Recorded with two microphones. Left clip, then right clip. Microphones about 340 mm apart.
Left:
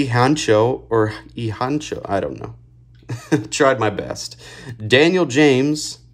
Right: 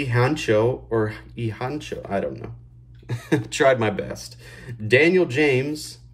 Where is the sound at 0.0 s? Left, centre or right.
Centre.